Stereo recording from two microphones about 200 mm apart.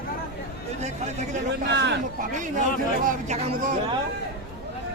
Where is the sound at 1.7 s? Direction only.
60° right (ahead or behind).